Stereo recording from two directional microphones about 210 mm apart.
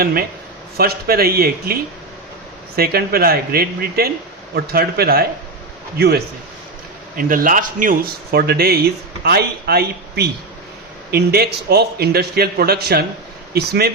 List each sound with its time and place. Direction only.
0.0 s a man's voice: 45° right (ahead or behind)
2.7 s a man's voice: 45° right (ahead or behind)